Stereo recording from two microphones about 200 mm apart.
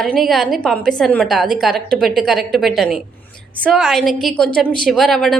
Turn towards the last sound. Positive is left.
turn(degrees=0)  # may be behind; listen again after turning